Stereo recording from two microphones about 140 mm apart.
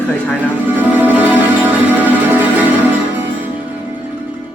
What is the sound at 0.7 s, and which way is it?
Music, 15° right (ahead or behind).